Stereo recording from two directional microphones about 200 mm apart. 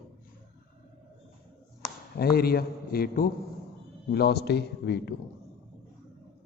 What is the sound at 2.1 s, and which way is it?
A man's voice, 50° left (ahead or behind).